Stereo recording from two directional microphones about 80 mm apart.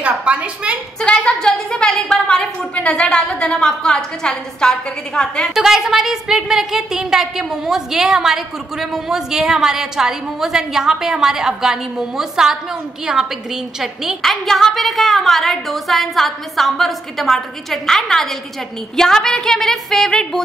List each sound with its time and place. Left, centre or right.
0.1 s a woman's voice: centre
1.0 s a woman's voice: centre
5.5 s a woman's voice: centre